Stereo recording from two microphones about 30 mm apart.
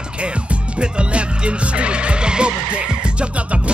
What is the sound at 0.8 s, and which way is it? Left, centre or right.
Skidding, right.